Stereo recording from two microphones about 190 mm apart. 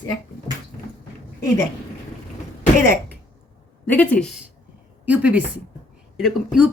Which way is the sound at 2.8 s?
50° right (ahead or behind).